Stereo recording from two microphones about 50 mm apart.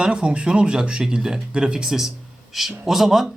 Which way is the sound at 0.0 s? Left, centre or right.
Right.